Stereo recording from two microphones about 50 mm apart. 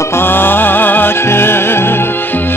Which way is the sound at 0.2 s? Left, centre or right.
Left.